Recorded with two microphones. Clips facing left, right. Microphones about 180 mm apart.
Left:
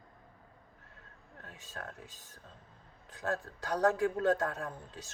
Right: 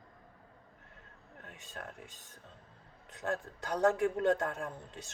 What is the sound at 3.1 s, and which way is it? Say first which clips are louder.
A man's voice: even; 20° right (ahead or behind).